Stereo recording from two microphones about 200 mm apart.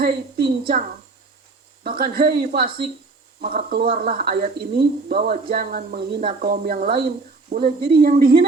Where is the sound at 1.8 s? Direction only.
45° right (ahead or behind).